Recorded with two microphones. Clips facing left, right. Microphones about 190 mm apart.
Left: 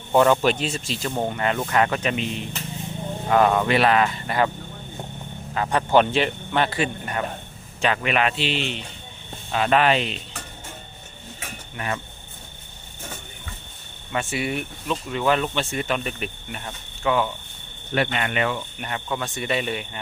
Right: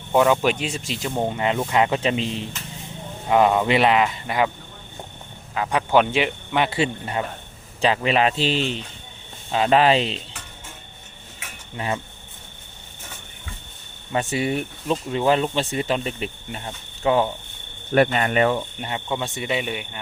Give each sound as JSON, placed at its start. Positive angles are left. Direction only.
{"t": 0.1, "sound": "speech", "side_deg": -5}
{"t": 3.2, "sound": "speech", "side_deg": -15}
{"t": 5.5, "sound": "speech", "side_deg": -5}
{"t": 6.7, "sound": "speech", "side_deg": -25}
{"t": 9.5, "sound": "speech", "side_deg": -25}
{"t": 14.1, "sound": "speech", "side_deg": -35}
{"t": 17.9, "sound": "speech", "side_deg": -45}
{"t": 18.8, "sound": "speech", "side_deg": -25}